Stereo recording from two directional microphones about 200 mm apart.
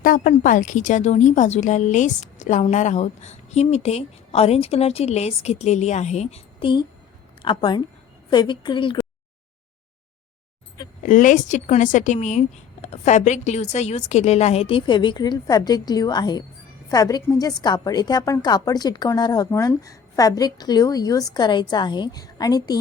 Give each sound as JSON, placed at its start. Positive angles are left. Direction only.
{"t": 0.0, "sound": "a woman's voice", "side_deg": 40}
{"t": 11.0, "sound": "a woman's voice", "side_deg": 40}